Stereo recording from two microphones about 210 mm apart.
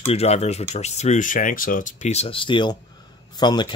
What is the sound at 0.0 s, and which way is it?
Speech, 30° left (ahead or behind).